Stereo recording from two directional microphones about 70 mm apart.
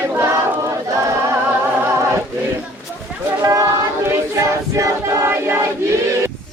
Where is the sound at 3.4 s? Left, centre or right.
Right.